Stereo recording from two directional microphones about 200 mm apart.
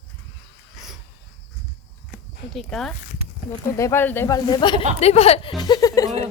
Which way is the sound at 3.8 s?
10° left (ahead or behind).